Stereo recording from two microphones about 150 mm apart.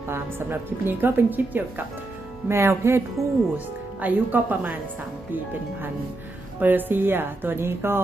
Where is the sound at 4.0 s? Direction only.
10° right (ahead or behind).